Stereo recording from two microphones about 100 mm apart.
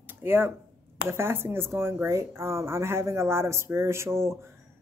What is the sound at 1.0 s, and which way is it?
Speech, 25° right (ahead or behind).